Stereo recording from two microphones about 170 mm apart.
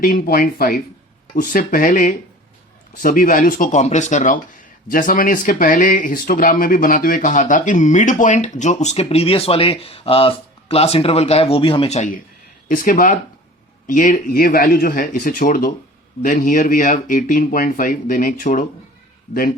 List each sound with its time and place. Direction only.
0.0 s speech: 60° left (ahead or behind)